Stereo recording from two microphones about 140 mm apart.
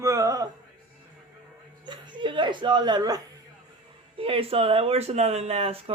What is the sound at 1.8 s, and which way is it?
Speech, 35° right (ahead or behind).